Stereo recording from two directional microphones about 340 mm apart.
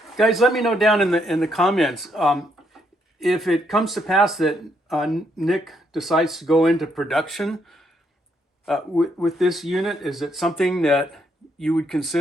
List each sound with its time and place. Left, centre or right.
0.2 s speech: centre